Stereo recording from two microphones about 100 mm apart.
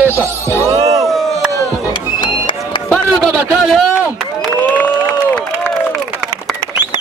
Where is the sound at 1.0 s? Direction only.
Centre (ahead or behind).